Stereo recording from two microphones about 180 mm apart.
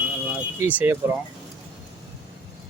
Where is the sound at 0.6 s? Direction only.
10° right (ahead or behind).